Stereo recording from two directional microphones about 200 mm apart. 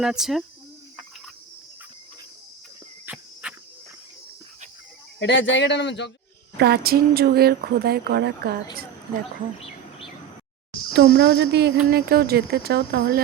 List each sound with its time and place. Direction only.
0.0 s speech: centre (ahead or behind)
3.1 s insect: 10° right (ahead or behind)
3.4 s cricket: 5° right (ahead or behind)
5.2 s a man's voice: 60° left (ahead or behind)
6.6 s speech: 50° right (ahead or behind)
10.7 s a sound: 50° left (ahead or behind)
10.9 s speech: 55° right (ahead or behind)